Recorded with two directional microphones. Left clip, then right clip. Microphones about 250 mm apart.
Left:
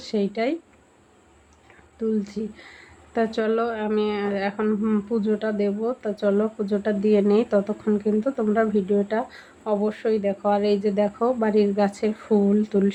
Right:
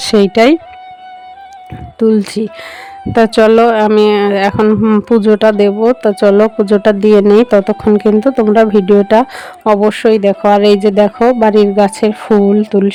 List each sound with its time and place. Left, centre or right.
0.0 s speech: right
2.0 s speech: right